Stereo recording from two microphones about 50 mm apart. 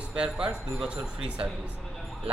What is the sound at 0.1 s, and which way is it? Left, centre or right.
A man's voice, centre.